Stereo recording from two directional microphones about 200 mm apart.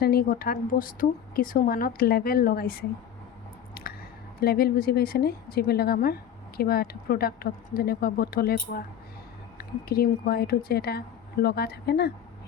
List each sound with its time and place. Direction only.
0.0 s a woman's voice: 50° left (ahead or behind)
3.8 s squish: 50° left (ahead or behind)
4.4 s a woman's voice: 50° left (ahead or behind)